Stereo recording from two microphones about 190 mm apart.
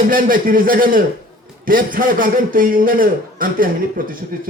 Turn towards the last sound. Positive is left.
turn(degrees=-50)  # may be behind; listen again after turning